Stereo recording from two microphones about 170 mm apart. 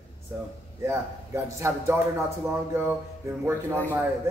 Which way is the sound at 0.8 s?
15° right (ahead or behind).